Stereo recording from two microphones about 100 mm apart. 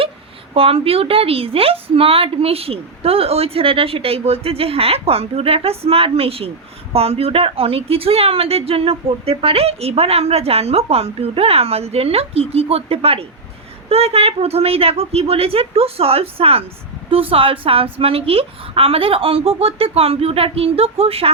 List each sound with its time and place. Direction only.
0.5 s a woman's voice: 70° right (ahead or behind)
17.1 s a woman's voice: 65° right (ahead or behind)